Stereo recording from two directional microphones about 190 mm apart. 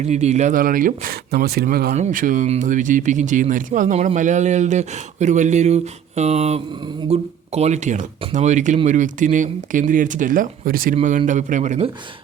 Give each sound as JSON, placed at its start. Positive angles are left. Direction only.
{"t": 0.0, "sound": "speech", "side_deg": -35}